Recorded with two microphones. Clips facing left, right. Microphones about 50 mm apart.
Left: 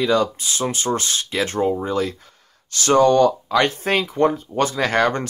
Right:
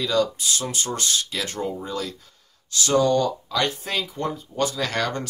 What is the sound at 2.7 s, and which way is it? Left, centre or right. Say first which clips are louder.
Speech: left 5 dB; left.